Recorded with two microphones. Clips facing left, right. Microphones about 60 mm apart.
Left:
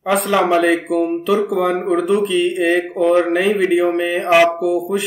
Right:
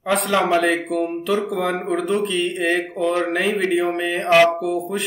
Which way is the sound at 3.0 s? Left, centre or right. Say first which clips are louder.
Left 8 dB; centre.